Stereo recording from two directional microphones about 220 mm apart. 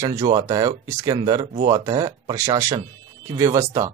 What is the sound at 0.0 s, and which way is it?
Speech, 15° right (ahead or behind).